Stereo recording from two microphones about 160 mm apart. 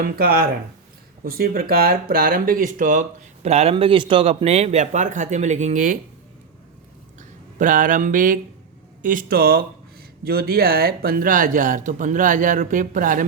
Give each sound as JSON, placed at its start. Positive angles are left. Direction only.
{"t": 0.0, "sound": "speech", "side_deg": -70}
{"t": 7.6, "sound": "speech", "side_deg": -55}